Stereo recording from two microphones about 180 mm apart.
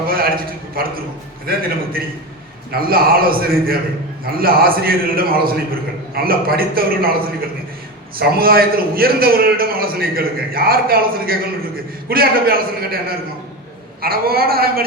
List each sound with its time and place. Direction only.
0.1 s a sound: 55° right (ahead or behind)
1.5 s a man's voice: 55° right (ahead or behind)
2.7 s a man's voice: 55° right (ahead or behind)